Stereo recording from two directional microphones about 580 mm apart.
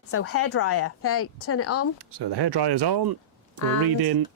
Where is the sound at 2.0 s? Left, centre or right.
Right.